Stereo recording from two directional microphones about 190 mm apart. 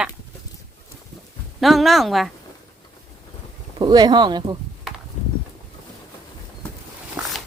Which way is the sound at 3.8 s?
20° right (ahead or behind).